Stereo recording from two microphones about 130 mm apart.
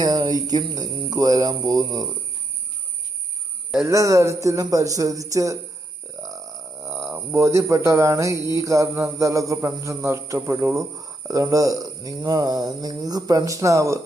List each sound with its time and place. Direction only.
0.0 s speech: 30° right (ahead or behind)
3.8 s cricket: 25° right (ahead or behind)
7.1 s cricket: 20° right (ahead or behind)